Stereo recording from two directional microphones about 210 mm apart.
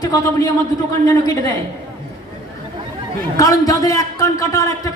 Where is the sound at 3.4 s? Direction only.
15° left (ahead or behind).